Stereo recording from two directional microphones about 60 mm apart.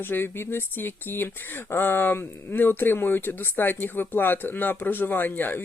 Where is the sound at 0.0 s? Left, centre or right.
Left.